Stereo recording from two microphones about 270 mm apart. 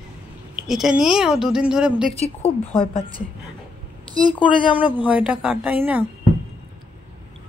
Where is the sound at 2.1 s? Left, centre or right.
Left.